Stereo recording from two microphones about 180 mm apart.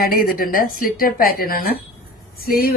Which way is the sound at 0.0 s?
55° left (ahead or behind).